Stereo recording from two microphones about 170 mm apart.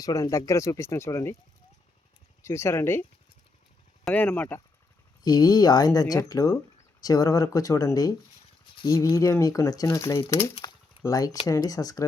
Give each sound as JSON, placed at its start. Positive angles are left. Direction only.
{"t": 0.0, "sound": "speech", "side_deg": 20}
{"t": 2.4, "sound": "speech", "side_deg": 15}
{"t": 5.2, "sound": "speech", "side_deg": 20}
{"t": 10.6, "sound": "a sound", "side_deg": 20}
{"t": 11.4, "sound": "speech", "side_deg": 20}